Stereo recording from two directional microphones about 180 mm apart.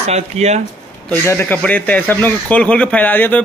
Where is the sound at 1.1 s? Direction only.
10° left (ahead or behind).